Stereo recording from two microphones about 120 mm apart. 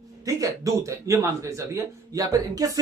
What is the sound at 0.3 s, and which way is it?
Speech, 25° right (ahead or behind).